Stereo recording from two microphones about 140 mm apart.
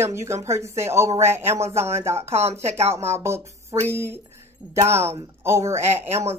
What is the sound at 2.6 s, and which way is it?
Speech, 50° right (ahead or behind).